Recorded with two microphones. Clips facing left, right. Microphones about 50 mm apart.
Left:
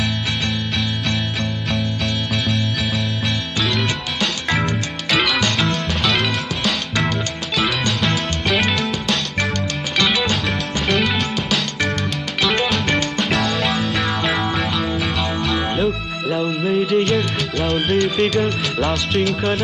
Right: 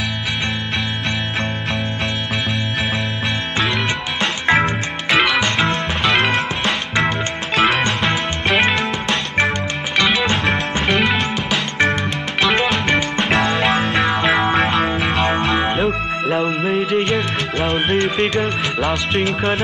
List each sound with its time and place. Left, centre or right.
3.5 s music: right
5.1 s music: centre
5.4 s music: right
6.6 s music: centre
10.2 s music: right
10.9 s music: centre
12.6 s music: centre
14.7 s music: right
15.4 s music: right
16.6 s music of bollywood: centre
17.0 s music: centre